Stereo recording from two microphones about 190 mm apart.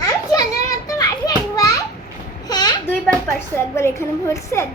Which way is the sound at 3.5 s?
15° left (ahead or behind).